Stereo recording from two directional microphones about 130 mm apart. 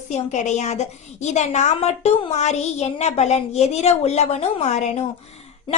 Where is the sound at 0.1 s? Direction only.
65° left (ahead or behind).